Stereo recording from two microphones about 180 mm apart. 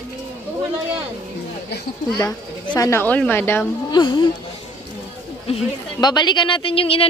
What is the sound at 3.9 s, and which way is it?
Speech, 25° left (ahead or behind).